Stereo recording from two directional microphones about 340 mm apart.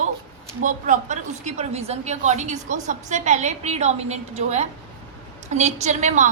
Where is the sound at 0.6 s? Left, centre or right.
Right.